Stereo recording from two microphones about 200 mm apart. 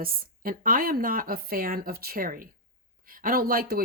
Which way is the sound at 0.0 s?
45° right (ahead or behind).